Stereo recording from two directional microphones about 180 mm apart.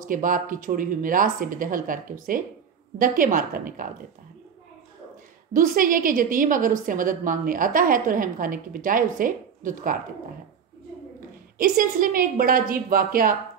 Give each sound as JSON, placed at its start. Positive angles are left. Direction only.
{"t": 0.0, "sound": "a woman's voice", "side_deg": -50}
{"t": 5.5, "sound": "a woman's voice", "side_deg": -50}
{"t": 11.5, "sound": "a woman's voice", "side_deg": -50}